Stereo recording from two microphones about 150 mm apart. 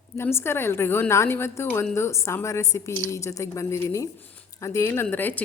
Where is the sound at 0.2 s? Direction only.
15° left (ahead or behind).